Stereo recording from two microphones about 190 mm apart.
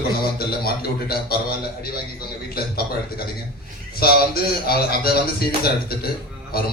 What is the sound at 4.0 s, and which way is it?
A man's voice, 55° left (ahead or behind).